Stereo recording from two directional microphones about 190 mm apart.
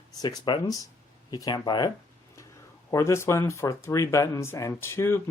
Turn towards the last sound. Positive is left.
turn(degrees=15)  # may be behind; listen again after turning